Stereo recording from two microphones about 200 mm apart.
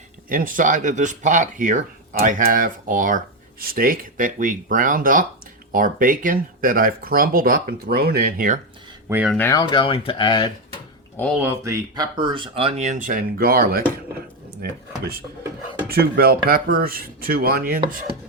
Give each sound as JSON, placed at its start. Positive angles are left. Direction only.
{"t": 0.3, "sound": "speech", "side_deg": -45}
{"t": 9.0, "sound": "speech", "side_deg": -10}
{"t": 9.3, "sound": "speech", "side_deg": 15}
{"t": 11.3, "sound": "speech", "side_deg": -10}
{"t": 15.9, "sound": "speech", "side_deg": -50}